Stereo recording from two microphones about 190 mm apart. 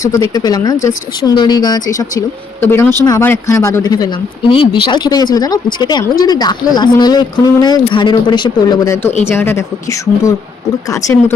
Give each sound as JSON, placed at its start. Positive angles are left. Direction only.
{"t": 0.0, "sound": "a woman's voice", "side_deg": 20}